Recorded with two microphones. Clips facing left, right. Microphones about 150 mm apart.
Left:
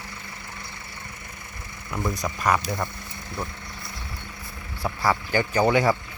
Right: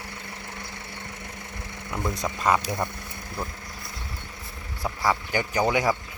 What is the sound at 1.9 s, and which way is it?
Speech, 5° right (ahead or behind).